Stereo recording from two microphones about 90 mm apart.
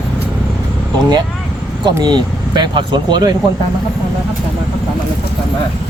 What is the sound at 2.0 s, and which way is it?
Speech, 50° right (ahead or behind).